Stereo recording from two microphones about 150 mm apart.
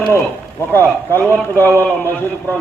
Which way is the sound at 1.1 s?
15° left (ahead or behind).